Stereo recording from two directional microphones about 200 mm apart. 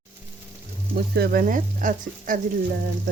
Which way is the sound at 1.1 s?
50° right (ahead or behind).